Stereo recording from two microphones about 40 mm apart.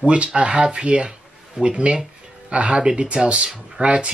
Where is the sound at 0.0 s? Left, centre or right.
Right.